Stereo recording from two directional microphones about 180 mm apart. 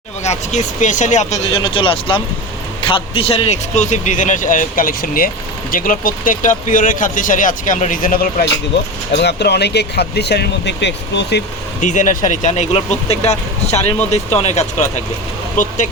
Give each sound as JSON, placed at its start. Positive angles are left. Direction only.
{"t": 0.3, "sound": "speech", "side_deg": 40}
{"t": 1.6, "sound": "speech", "side_deg": 30}
{"t": 9.1, "sound": "speech", "side_deg": 65}
{"t": 11.8, "sound": "speech", "side_deg": 45}